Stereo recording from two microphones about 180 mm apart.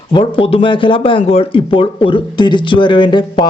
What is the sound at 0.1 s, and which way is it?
Speech, 30° left (ahead or behind).